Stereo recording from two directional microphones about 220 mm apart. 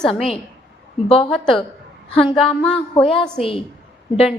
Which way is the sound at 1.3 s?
Centre (ahead or behind).